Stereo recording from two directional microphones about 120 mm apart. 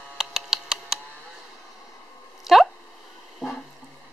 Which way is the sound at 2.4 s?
Centre (ahead or behind).